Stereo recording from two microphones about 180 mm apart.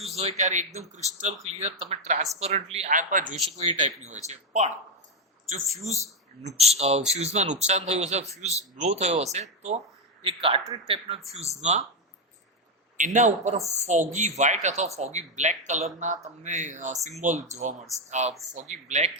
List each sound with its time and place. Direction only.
0.2 s a man's voice: 40° right (ahead or behind)
13.0 s a man's voice: 40° right (ahead or behind)